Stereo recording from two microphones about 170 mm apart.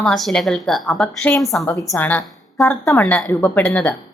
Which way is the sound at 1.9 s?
15° left (ahead or behind).